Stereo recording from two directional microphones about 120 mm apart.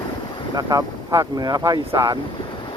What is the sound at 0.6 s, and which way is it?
Speech, 30° right (ahead or behind).